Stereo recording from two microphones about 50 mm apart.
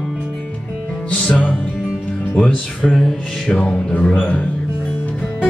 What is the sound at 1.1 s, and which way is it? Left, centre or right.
Music, left.